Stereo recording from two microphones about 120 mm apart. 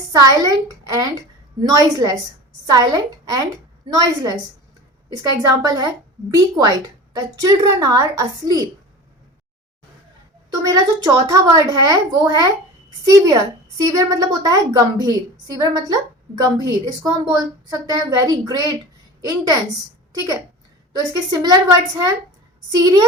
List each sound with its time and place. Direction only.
0.1 s a woman's voice: 30° right (ahead or behind)
10.5 s a woman's voice: 30° right (ahead or behind)
21.1 s a woman's voice: 30° right (ahead or behind)